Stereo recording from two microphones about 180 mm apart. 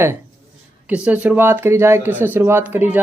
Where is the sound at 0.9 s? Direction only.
10° right (ahead or behind).